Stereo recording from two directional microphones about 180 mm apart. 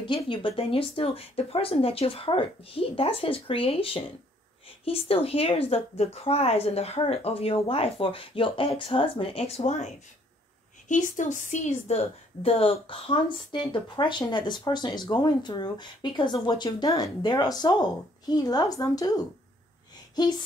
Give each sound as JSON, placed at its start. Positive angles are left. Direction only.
{"t": 0.0, "sound": "a woman's voice", "side_deg": 25}
{"t": 10.9, "sound": "a woman's voice", "side_deg": 45}